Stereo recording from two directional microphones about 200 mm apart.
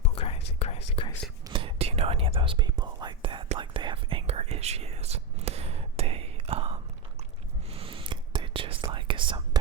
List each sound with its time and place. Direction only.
0.0 s whispering: 30° left (ahead or behind)
1.5 s whispering: 25° right (ahead or behind)